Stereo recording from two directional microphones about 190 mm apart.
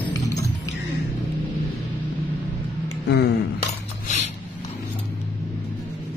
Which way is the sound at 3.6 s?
40° left (ahead or behind).